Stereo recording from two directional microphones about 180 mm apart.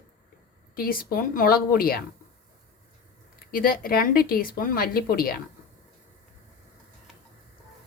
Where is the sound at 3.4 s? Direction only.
55° left (ahead or behind).